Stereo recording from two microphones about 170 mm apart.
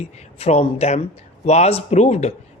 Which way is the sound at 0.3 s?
35° left (ahead or behind).